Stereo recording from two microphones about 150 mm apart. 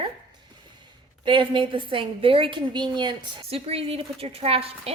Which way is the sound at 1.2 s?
35° right (ahead or behind).